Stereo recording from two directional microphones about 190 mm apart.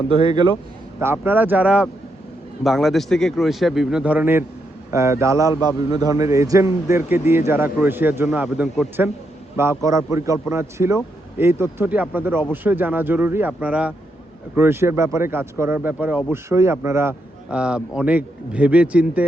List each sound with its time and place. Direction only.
0.1 s a man's voice: 25° right (ahead or behind)
0.9 s a man's voice: 10° right (ahead or behind)
9.6 s a man's voice: 15° right (ahead or behind)